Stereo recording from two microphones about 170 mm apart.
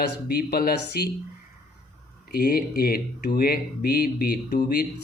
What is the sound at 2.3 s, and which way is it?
Speech, 65° left (ahead or behind).